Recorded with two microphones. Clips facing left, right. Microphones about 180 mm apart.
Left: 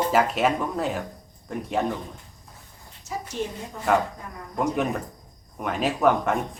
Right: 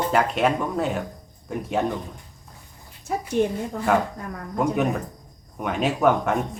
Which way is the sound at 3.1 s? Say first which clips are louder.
Right 5 dB; 60° right (ahead or behind).